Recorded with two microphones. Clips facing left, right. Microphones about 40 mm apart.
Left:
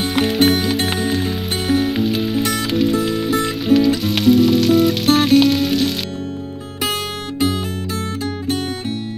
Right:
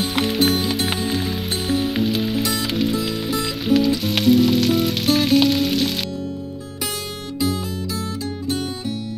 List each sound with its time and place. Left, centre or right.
0.5 s music: centre
6.8 s music: left